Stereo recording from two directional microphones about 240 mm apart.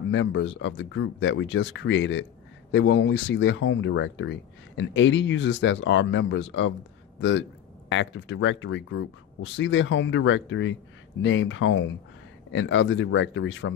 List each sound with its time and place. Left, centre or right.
0.1 s a man's voice: left